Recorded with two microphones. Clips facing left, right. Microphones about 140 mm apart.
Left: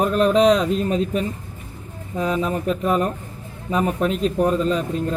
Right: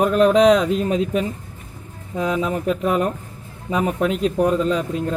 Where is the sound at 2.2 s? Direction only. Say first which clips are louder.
Right 1 dB; 15° right (ahead or behind).